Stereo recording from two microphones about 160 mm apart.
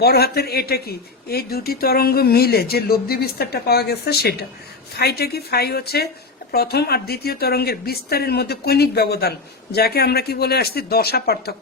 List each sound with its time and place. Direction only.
0.0 s a woman's voice: 75° left (ahead or behind)